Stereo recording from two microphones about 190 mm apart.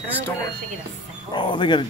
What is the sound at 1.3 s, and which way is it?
Speech, 25° left (ahead or behind).